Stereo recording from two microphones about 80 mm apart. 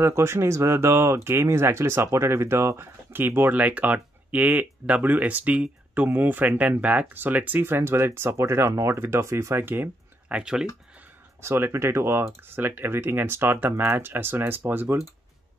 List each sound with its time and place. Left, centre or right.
0.0 s speech: right
10.2 s speech: centre
11.4 s speech: right